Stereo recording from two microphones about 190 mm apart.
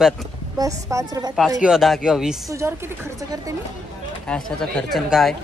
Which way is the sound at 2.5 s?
15° right (ahead or behind).